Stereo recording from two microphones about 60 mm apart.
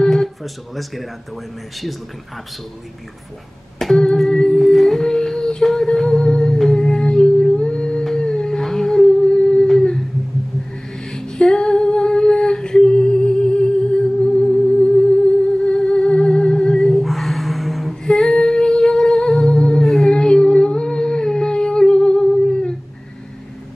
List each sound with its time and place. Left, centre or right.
0.0 s speech: centre
3.8 s humming: centre
11.1 s female singing: centre
15.6 s music: centre